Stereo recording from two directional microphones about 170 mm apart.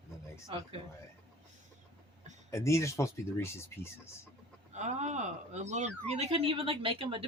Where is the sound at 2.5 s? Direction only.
15° left (ahead or behind).